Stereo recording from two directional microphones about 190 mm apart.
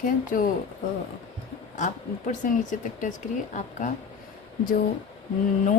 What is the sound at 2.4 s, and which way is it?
Speech, 40° left (ahead or behind).